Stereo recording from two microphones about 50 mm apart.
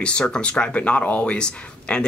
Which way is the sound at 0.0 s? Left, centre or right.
Centre.